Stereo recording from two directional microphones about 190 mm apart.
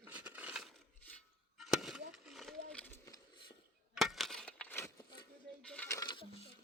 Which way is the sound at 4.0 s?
Centre (ahead or behind).